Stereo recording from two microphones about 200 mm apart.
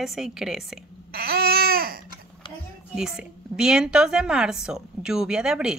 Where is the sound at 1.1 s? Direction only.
50° right (ahead or behind).